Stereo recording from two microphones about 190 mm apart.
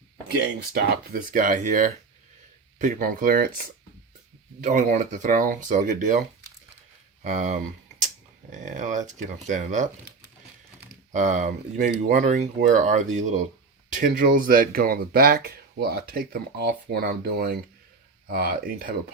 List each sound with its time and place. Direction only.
0.3 s speech: 55° right (ahead or behind)
4.6 s speech: 40° right (ahead or behind)
7.3 s speech: 40° right (ahead or behind)
11.1 s speech: 40° right (ahead or behind)